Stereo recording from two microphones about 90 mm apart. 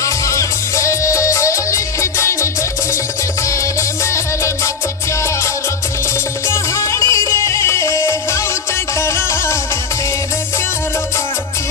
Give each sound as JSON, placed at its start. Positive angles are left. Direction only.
{"t": 0.0, "sound": "music", "side_deg": 35}
{"t": 4.0, "sound": "music", "side_deg": 30}
{"t": 6.5, "sound": "music", "side_deg": 35}